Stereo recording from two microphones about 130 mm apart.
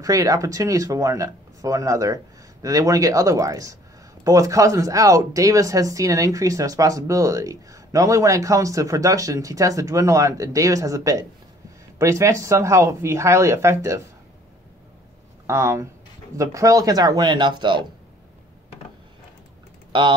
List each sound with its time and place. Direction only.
0.0 s speech: 25° right (ahead or behind)
15.4 s speech: 20° right (ahead or behind); by 17.8 s 35° right (ahead or behind)
19.9 s speech: 40° right (ahead or behind)